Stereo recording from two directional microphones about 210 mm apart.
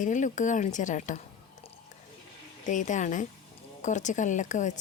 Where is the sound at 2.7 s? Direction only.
35° left (ahead or behind).